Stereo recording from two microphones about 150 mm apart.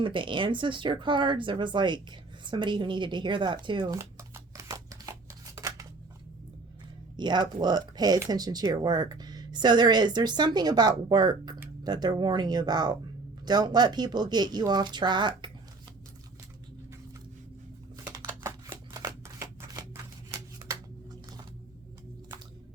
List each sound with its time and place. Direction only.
0.0 s speech: 35° right (ahead or behind)
3.9 s a sound: 20° right (ahead or behind)
7.2 s speech: 30° right (ahead or behind)
18.7 s shuffling cards: 25° right (ahead or behind)